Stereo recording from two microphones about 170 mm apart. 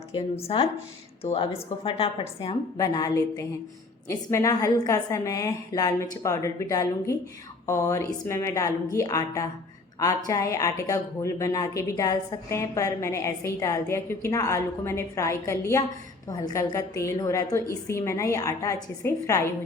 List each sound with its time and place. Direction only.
0.1 s a woman's voice: 35° left (ahead or behind); by 19.4 s 20° left (ahead or behind)